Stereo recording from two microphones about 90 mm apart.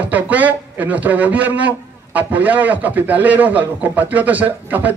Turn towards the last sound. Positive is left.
turn(degrees=-20)  # may be behind; listen again after turning